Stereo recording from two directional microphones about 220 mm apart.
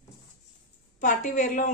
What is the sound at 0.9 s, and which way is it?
Speech, 35° left (ahead or behind).